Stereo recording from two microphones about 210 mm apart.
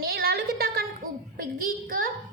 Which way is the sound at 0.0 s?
45° right (ahead or behind).